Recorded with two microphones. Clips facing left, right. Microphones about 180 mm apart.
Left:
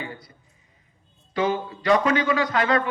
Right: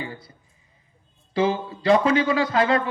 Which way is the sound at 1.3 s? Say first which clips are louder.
Right 2 dB; 30° right (ahead or behind).